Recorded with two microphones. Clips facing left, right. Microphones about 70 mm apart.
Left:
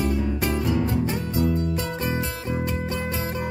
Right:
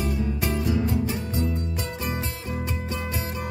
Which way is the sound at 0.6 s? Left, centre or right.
Left.